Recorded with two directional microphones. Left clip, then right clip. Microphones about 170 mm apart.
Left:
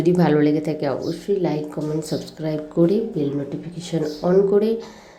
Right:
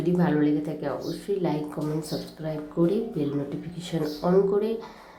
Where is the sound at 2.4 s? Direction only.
15° left (ahead or behind).